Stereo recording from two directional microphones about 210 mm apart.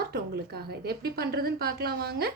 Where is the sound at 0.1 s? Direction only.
50° right (ahead or behind).